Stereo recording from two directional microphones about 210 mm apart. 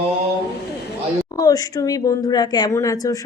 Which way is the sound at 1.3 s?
15° left (ahead or behind).